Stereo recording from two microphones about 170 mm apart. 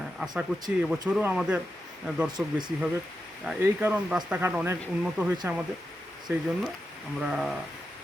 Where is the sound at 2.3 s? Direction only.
25° right (ahead or behind).